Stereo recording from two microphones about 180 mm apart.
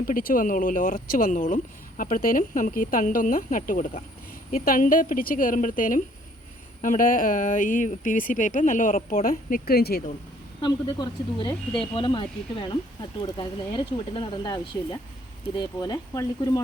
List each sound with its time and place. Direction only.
0.1 s speech: 50° left (ahead or behind)
10.6 s speech: 25° left (ahead or behind)